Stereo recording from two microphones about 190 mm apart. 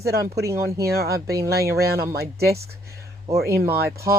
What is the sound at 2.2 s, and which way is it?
Speech, 55° right (ahead or behind).